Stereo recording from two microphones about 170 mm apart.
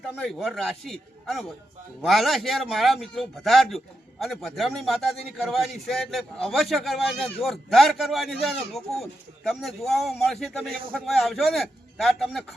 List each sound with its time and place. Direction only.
0.2 s a man's voice: centre (ahead or behind)